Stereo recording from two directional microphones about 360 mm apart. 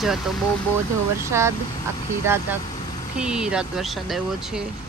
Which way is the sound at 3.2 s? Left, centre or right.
Centre.